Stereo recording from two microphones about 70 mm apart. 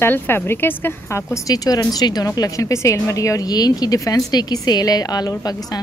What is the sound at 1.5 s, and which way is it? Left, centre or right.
A woman's voice, left.